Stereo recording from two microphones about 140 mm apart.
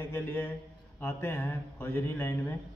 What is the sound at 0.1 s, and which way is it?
A man's voice, 15° left (ahead or behind).